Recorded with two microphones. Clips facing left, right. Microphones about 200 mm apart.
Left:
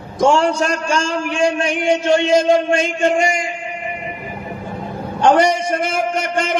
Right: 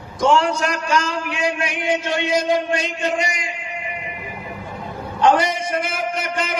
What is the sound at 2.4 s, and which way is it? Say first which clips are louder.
Speech: left 5 dB; 50° left (ahead or behind).